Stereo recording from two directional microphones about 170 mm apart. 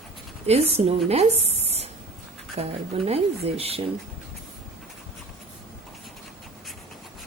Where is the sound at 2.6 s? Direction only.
35° right (ahead or behind).